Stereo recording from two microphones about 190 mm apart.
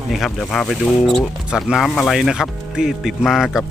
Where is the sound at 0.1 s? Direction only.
Centre (ahead or behind).